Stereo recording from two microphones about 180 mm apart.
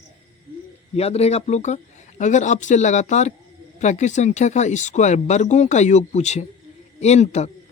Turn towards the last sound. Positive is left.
turn(degrees=40)  # may be behind; listen again after turning